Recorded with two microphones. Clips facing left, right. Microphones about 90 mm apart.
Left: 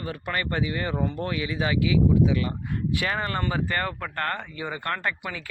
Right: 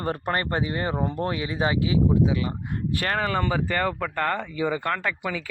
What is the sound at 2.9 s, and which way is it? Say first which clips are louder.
Speech: right 1 dB; 45° right (ahead or behind).